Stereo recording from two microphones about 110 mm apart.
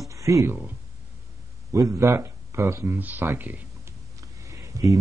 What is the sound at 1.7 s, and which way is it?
A man's voice, 30° right (ahead or behind).